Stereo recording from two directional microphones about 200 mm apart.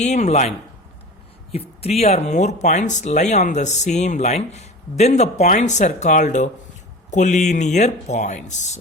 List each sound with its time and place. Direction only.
0.0 s speech: 35° left (ahead or behind)
1.5 s speech: 30° left (ahead or behind)